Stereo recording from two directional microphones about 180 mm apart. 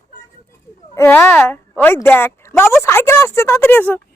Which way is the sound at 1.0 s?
10° left (ahead or behind).